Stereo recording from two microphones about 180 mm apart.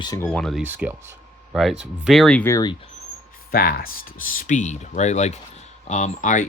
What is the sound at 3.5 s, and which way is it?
Speech, 55° left (ahead or behind).